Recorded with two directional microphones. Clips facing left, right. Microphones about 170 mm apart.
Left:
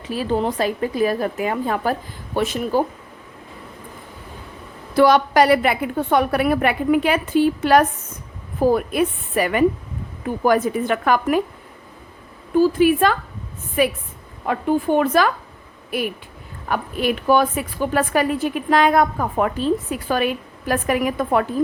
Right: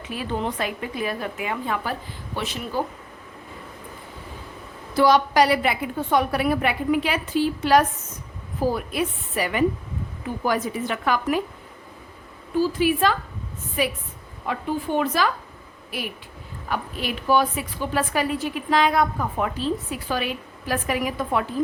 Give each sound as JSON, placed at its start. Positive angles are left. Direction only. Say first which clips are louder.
{"t": 0.1, "sound": "a woman's voice", "louder": "left 6 dB", "side_deg": 35}
{"t": 4.9, "sound": "a woman's voice", "louder": "left 3 dB", "side_deg": 55}
{"t": 12.5, "sound": "a woman's voice", "louder": "left 6 dB", "side_deg": 55}